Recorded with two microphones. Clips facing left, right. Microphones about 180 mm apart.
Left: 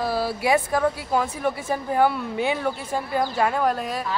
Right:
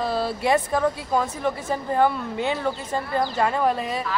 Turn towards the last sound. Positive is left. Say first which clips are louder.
# right 1 dB
turn(degrees=0)  # may be behind; listen again after turning